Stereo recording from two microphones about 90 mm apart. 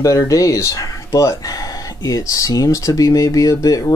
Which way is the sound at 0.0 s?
35° left (ahead or behind).